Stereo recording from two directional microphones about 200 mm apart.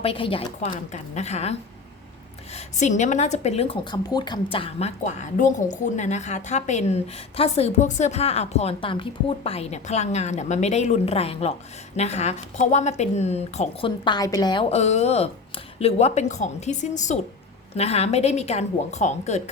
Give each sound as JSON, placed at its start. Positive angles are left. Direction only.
{"t": 0.0, "sound": "a woman's voice", "side_deg": 25}